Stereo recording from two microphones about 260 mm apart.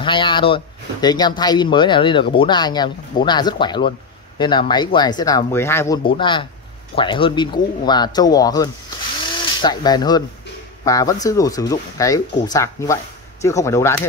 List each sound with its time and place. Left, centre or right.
0.0 s speech: centre